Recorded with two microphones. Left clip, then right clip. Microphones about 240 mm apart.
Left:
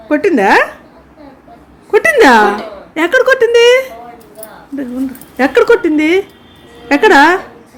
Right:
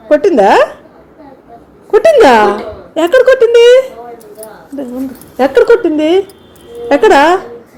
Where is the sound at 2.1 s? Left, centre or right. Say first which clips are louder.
Left 1 dB; centre.